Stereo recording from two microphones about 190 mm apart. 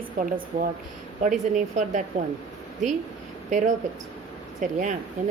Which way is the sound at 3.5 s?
40° right (ahead or behind).